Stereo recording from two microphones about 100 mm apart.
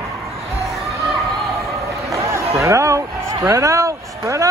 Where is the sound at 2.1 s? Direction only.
30° right (ahead or behind).